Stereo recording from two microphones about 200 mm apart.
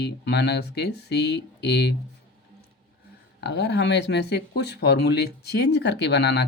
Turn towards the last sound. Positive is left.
turn(degrees=55)  # may be behind; listen again after turning